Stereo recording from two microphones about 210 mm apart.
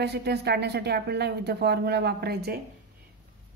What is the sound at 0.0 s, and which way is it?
Speech, 50° right (ahead or behind).